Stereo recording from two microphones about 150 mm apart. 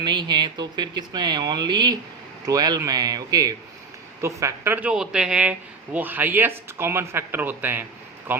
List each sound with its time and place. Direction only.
0.0 s speech: 30° right (ahead or behind); by 8.4 s 15° right (ahead or behind)